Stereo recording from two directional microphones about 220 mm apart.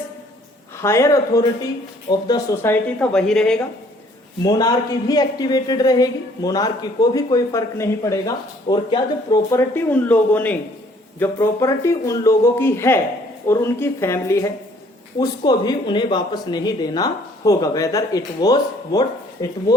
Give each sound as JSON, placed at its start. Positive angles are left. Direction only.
{"t": 0.8, "sound": "speech", "side_deg": 10}
{"t": 4.4, "sound": "speech", "side_deg": 15}